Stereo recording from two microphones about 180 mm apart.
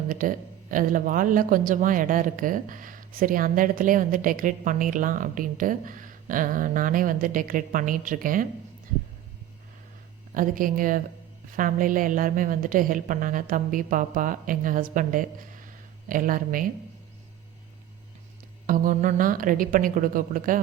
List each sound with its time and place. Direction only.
0.1 s speech: 50° right (ahead or behind)
10.3 s speech: 50° right (ahead or behind)
18.6 s speech: 50° right (ahead or behind)